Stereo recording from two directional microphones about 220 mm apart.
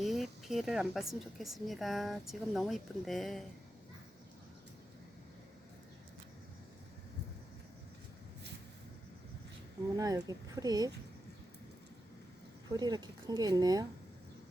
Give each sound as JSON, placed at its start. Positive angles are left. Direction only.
{"t": 0.0, "sound": "a woman's voice", "side_deg": 0}
{"t": 10.0, "sound": "speech", "side_deg": -15}
{"t": 12.7, "sound": "speech", "side_deg": -20}